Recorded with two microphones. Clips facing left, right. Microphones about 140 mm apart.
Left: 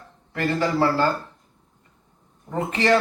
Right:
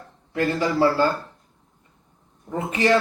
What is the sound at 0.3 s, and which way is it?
Speech, 15° right (ahead or behind).